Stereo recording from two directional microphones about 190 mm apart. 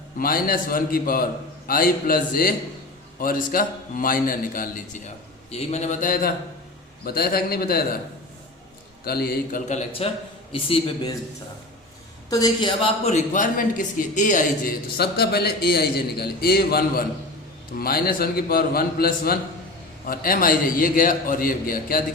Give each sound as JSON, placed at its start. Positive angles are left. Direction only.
{"t": 0.2, "sound": "a man's voice", "side_deg": 50}
{"t": 5.5, "sound": "a man's voice", "side_deg": 35}
{"t": 9.0, "sound": "a man's voice", "side_deg": 55}
{"t": 9.6, "sound": "a man's voice", "side_deg": 35}
{"t": 12.3, "sound": "speech", "side_deg": 20}
{"t": 14.9, "sound": "a man's voice", "side_deg": 55}